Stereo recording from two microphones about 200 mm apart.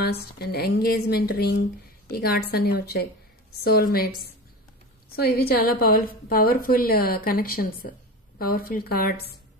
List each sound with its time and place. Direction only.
0.0 s a woman's voice: 50° left (ahead or behind)